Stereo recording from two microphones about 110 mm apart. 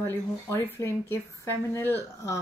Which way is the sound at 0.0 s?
25° left (ahead or behind).